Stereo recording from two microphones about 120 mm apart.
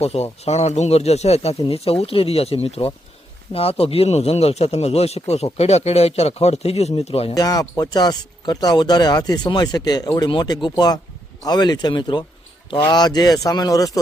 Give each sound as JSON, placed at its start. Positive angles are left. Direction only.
{"t": 0.0, "sound": "speech", "side_deg": 60}
{"t": 7.3, "sound": "speech", "side_deg": 30}